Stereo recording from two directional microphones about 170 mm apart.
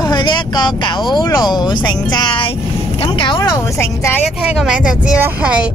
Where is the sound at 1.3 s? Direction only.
25° left (ahead or behind).